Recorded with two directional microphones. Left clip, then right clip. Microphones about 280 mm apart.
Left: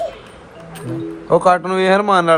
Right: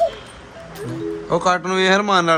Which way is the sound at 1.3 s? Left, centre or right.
Centre.